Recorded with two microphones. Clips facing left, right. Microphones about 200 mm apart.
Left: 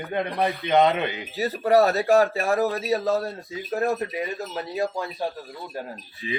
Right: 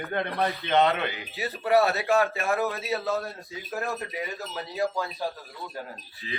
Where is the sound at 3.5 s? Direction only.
15° left (ahead or behind).